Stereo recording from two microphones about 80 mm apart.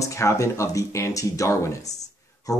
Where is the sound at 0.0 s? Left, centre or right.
Left.